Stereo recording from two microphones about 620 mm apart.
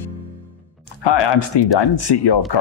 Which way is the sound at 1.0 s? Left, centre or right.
Left.